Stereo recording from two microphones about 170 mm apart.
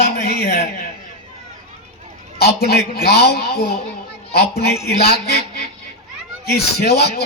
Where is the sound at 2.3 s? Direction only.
70° left (ahead or behind).